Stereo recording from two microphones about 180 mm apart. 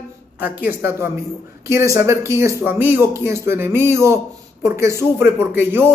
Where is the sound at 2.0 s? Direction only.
15° right (ahead or behind).